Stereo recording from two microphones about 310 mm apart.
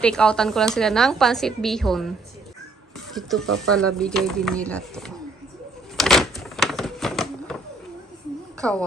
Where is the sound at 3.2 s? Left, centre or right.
Centre.